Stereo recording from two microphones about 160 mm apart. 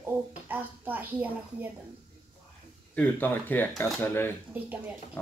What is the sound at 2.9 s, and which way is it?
Speech, 10° left (ahead or behind).